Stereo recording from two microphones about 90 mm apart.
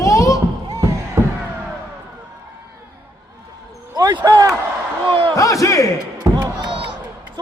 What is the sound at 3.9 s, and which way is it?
Basketball bounce, 50° right (ahead or behind).